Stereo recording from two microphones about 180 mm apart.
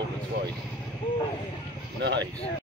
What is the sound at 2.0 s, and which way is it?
Speech, 75° right (ahead or behind).